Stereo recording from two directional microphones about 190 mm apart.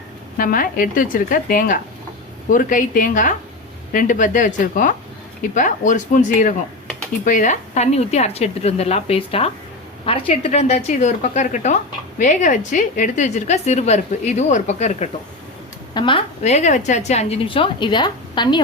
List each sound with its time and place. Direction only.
0.3 s a woman's voice: 45° left (ahead or behind); by 18.6 s 25° left (ahead or behind)